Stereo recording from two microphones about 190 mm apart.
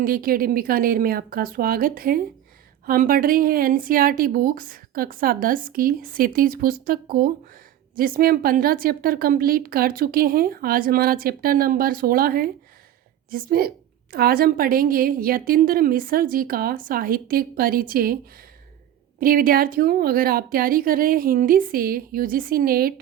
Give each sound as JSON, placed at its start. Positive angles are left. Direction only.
{"t": 0.0, "sound": "a woman's voice", "side_deg": -50}